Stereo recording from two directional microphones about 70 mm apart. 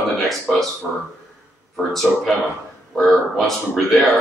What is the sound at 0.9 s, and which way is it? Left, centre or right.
Speech, centre.